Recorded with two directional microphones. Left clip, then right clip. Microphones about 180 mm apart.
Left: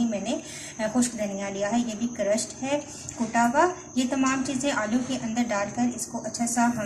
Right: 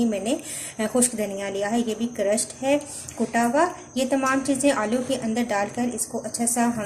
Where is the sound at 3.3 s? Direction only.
50° right (ahead or behind).